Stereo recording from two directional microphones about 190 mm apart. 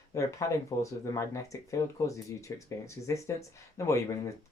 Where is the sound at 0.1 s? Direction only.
15° left (ahead or behind).